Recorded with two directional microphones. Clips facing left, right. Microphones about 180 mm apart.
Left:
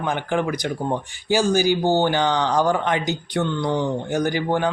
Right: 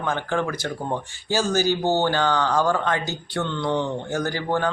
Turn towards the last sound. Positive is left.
turn(degrees=15)  # may be behind; listen again after turning